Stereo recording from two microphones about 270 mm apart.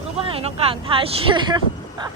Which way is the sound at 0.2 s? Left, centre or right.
Right.